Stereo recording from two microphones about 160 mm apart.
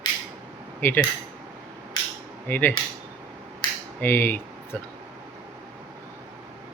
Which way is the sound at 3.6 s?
30° left (ahead or behind).